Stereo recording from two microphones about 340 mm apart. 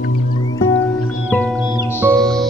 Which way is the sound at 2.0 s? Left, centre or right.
Centre.